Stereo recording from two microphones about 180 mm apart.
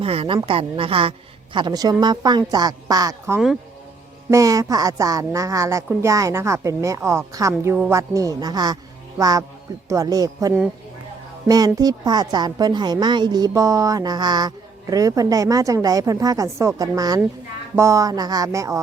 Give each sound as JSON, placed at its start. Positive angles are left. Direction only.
{"t": 0.0, "sound": "a woman's voice", "side_deg": -30}